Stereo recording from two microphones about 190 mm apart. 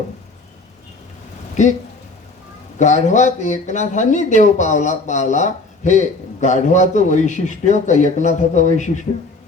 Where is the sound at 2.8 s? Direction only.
40° left (ahead or behind).